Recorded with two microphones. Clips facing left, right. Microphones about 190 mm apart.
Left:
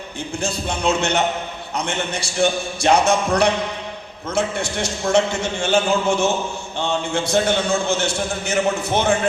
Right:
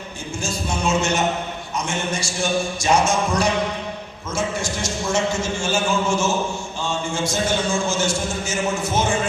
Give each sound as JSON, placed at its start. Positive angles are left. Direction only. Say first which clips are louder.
{"t": 0.4, "sound": "a man's voice", "louder": "left 2 dB", "side_deg": 60}